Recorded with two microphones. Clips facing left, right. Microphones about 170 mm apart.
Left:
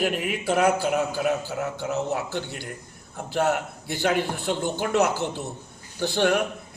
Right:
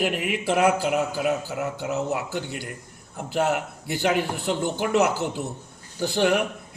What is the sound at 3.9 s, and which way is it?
A man's voice, 10° right (ahead or behind).